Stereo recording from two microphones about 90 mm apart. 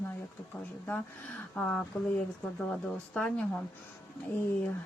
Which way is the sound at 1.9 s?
15° left (ahead or behind).